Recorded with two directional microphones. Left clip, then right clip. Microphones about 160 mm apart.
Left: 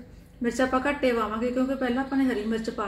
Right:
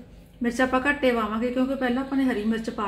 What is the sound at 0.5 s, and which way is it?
Speech, 45° right (ahead or behind).